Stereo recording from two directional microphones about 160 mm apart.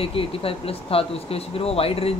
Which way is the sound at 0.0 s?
35° left (ahead or behind).